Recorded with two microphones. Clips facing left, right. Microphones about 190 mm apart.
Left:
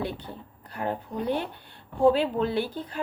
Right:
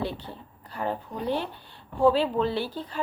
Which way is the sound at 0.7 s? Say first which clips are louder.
Even; 55° left (ahead or behind).